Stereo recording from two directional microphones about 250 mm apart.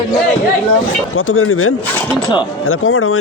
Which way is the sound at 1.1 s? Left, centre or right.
Left.